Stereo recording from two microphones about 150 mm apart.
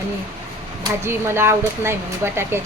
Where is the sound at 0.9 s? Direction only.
15° right (ahead or behind).